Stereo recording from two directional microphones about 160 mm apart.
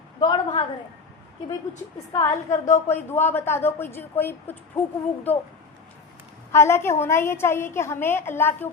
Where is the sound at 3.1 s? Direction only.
15° left (ahead or behind).